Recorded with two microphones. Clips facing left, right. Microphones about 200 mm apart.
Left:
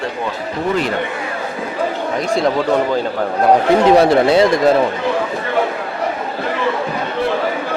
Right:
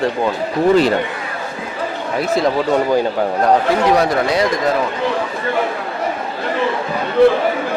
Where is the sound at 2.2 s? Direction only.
5° right (ahead or behind).